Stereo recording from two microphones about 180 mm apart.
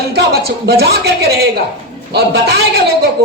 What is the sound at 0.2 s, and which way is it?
A woman's voice, 65° right (ahead or behind).